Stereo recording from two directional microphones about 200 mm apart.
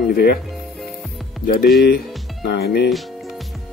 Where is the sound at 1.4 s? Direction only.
50° left (ahead or behind).